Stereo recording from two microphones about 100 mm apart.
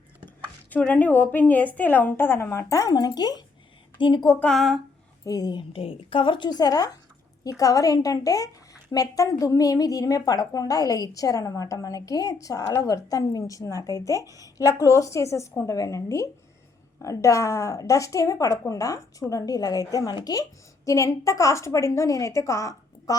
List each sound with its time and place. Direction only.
0.7 s a woman's voice: 15° left (ahead or behind); by 3.4 s 40° left (ahead or behind)
3.9 s speech: 50° left (ahead or behind)
4.5 s speech: centre (ahead or behind)
5.2 s a woman's voice: 40° left (ahead or behind)
5.7 s a woman's voice: 65° left (ahead or behind); by 23.1 s 30° left (ahead or behind)